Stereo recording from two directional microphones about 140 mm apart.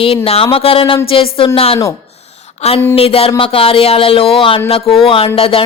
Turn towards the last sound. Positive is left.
turn(degrees=40)  # may be behind; listen again after turning